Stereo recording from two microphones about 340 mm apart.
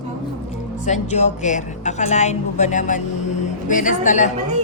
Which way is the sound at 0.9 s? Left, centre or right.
Centre.